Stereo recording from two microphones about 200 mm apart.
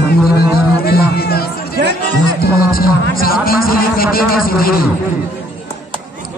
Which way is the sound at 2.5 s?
50° left (ahead or behind).